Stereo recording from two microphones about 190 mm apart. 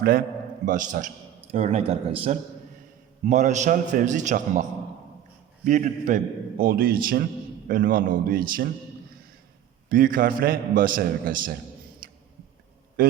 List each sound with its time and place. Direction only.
0.0 s a man's voice: 50° right (ahead or behind)
5.6 s a man's voice: 40° right (ahead or behind)
9.9 s a man's voice: 45° right (ahead or behind)
12.0 s a sound: 50° right (ahead or behind)